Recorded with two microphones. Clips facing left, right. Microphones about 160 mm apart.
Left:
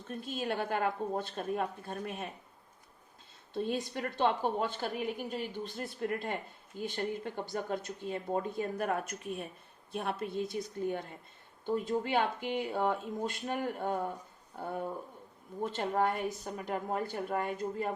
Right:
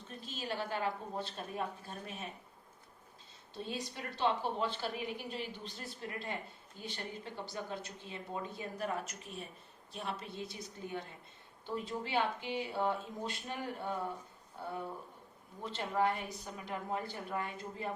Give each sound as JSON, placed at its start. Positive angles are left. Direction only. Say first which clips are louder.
{"t": 0.1, "sound": "a woman's voice", "louder": "left 6 dB", "side_deg": 50}
{"t": 3.5, "sound": "a woman's voice", "louder": "left 8 dB", "side_deg": 50}